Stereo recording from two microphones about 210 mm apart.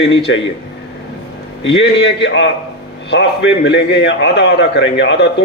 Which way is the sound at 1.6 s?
60° left (ahead or behind).